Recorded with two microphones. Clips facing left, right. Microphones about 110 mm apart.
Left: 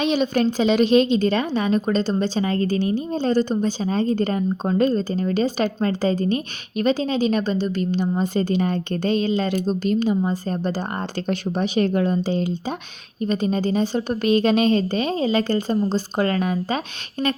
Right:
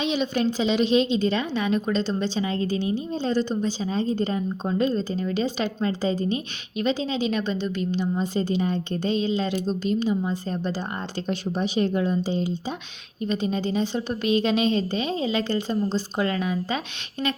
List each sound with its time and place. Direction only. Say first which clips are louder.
0.0 s a woman's voice: left 4 dB; 45° left (ahead or behind)
13.2 s a woman's voice: left 4 dB; 45° left (ahead or behind)